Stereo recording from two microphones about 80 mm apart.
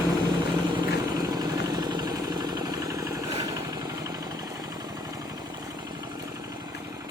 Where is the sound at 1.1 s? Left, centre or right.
Right.